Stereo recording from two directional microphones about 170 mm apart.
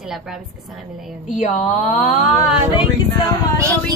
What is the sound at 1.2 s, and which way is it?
Speech, 45° left (ahead or behind).